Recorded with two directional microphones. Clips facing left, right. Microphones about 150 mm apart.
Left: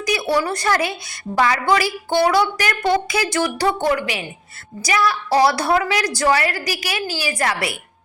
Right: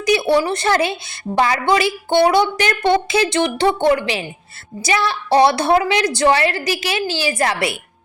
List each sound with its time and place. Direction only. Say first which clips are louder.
0.0 s a woman's voice: right 4 dB; 25° right (ahead or behind)